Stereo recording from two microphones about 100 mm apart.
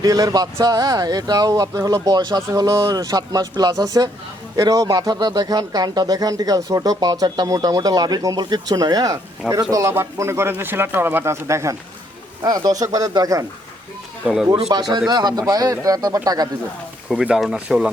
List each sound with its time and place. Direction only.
0.0 s speech: 40° right (ahead or behind)
14.7 s speech: 40° right (ahead or behind)
17.1 s speech: 5° right (ahead or behind)